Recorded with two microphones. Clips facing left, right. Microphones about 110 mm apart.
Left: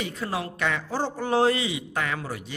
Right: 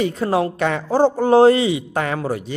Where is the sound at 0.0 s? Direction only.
40° right (ahead or behind).